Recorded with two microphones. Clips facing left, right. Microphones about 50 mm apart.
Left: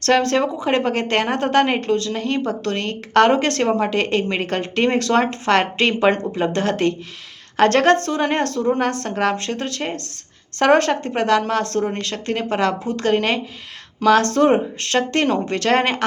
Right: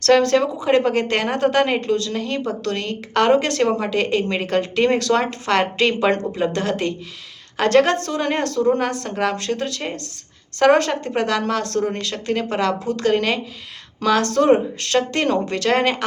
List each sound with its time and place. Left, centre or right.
0.0 s a woman's voice: left